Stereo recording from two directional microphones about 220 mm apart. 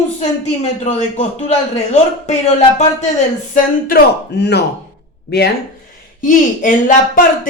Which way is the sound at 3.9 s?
50° left (ahead or behind).